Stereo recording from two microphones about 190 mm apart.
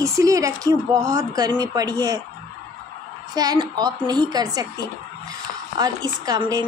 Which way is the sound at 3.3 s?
20° right (ahead or behind).